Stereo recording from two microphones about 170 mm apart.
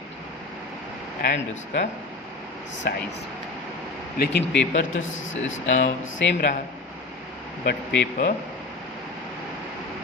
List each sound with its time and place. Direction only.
1.2 s speech: 70° left (ahead or behind)
4.2 s a man's voice: 80° left
7.6 s speech: 75° left (ahead or behind)